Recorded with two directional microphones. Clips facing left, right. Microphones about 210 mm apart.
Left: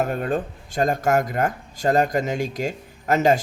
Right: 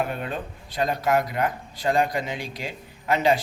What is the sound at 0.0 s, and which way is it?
Speech, 45° left (ahead or behind).